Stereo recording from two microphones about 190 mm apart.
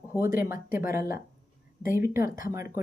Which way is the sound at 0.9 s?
50° left (ahead or behind).